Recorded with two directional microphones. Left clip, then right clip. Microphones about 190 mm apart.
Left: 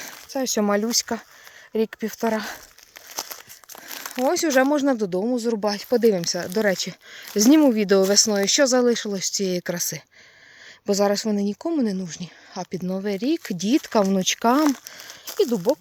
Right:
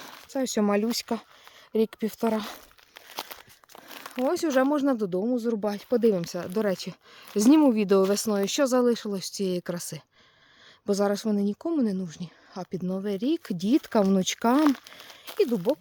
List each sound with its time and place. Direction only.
0.3 s speech: 10° right (ahead or behind)
3.1 s crumpling: 50° left (ahead or behind)
4.3 s speech: 5° left (ahead or behind); by 14.6 s 15° right (ahead or behind)
14.6 s speech: 55° left (ahead or behind)
15.4 s speech: 5° left (ahead or behind)